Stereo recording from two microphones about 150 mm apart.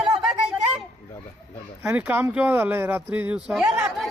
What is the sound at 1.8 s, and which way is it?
Speech, 10° right (ahead or behind).